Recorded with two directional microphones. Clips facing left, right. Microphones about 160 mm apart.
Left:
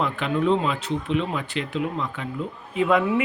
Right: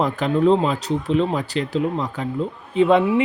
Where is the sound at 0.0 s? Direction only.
35° right (ahead or behind).